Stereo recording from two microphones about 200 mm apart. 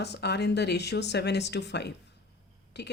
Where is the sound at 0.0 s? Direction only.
55° left (ahead or behind).